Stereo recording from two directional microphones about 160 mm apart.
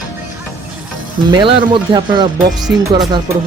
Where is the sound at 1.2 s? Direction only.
30° right (ahead or behind).